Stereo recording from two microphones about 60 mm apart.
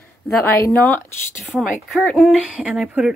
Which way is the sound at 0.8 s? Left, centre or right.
Left.